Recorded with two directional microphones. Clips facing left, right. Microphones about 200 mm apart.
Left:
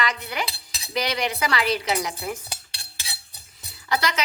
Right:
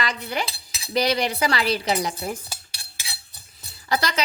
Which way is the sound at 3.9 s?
35° right (ahead or behind).